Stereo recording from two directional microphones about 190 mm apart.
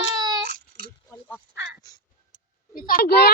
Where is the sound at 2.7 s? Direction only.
50° left (ahead or behind).